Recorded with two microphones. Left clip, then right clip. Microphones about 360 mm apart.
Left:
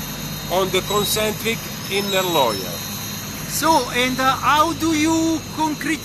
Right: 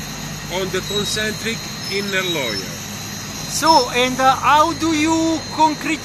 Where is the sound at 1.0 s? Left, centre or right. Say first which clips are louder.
Left 1 dB; centre.